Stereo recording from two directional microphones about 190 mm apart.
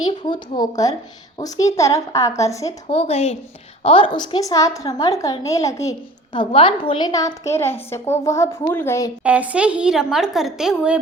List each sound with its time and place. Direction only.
0.2 s a woman's voice: 25° left (ahead or behind)
2.8 s a woman's voice: 30° left (ahead or behind); by 9.1 s 15° left (ahead or behind)
9.2 s a woman's voice: 5° right (ahead or behind)